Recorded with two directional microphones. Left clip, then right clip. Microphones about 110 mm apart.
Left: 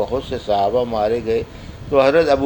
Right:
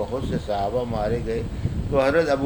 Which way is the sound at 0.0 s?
30° left (ahead or behind).